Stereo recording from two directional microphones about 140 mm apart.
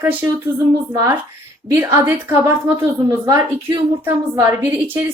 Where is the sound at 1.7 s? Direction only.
15° right (ahead or behind).